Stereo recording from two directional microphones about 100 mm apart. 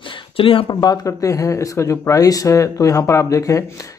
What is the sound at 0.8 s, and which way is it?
Speech, 35° left (ahead or behind).